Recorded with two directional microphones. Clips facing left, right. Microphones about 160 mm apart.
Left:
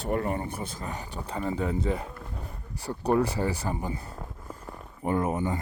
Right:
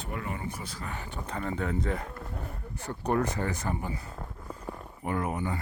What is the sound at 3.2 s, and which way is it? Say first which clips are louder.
Speech: left 3 dB; 10° left (ahead or behind).